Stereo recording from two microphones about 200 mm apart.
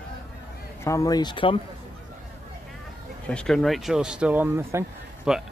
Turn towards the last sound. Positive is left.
turn(degrees=-5)  # may be behind; listen again after turning